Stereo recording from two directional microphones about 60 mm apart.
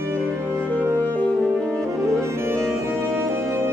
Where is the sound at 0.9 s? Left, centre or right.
Left.